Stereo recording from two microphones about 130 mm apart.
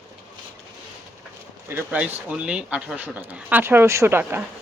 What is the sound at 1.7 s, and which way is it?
Speech, 15° right (ahead or behind).